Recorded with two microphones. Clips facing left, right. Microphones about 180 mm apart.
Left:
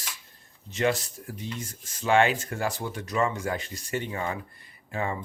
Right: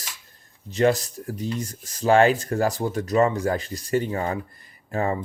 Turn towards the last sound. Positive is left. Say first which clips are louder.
# right 6 dB
turn(degrees=-40)  # may be behind; listen again after turning